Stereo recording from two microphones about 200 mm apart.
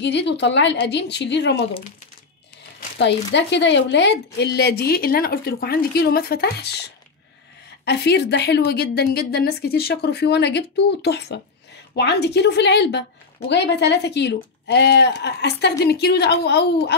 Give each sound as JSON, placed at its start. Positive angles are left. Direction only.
{"t": 0.0, "sound": "a woman's voice", "side_deg": 60}
{"t": 3.0, "sound": "a woman's voice", "side_deg": 60}
{"t": 7.8, "sound": "a woman's voice", "side_deg": 55}